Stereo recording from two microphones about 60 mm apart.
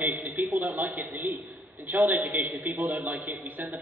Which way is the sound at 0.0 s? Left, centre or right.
Right.